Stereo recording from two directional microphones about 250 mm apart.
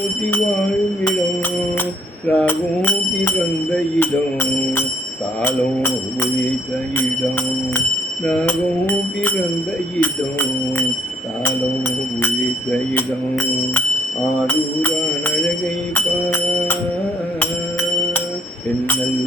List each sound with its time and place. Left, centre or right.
2.3 s music: centre
8.2 s music: centre
12.9 s music: centre
16.0 s music: centre